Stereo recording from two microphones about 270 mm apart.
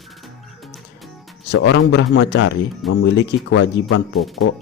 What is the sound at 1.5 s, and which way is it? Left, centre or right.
A man's voice, left.